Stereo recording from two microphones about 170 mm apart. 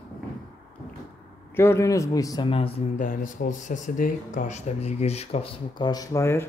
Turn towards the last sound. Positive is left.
turn(degrees=15)  # may be behind; listen again after turning